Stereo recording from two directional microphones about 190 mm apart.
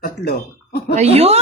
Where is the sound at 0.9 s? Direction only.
35° right (ahead or behind).